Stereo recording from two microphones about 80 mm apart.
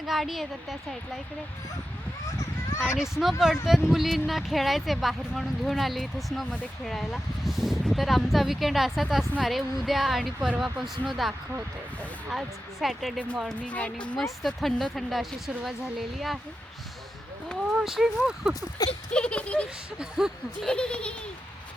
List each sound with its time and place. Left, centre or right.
0.0 s speech: centre
2.8 s speech: centre
13.5 s speech: centre
14.4 s speech: centre
17.7 s speech: centre
18.8 s speech: left
19.1 s speech: centre
20.0 s speech: centre
20.6 s speech: centre